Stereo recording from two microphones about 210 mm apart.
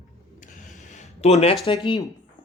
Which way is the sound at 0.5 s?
35° left (ahead or behind).